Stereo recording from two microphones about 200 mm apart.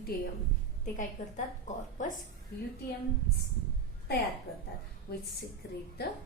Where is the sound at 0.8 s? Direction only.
40° left (ahead or behind).